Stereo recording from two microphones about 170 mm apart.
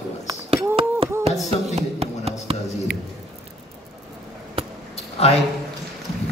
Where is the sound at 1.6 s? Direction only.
40° right (ahead or behind).